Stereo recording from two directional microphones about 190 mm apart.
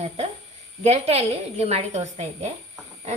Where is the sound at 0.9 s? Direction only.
35° right (ahead or behind).